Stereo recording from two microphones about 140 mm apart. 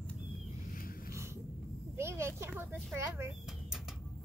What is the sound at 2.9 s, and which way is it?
Speech, 20° right (ahead or behind).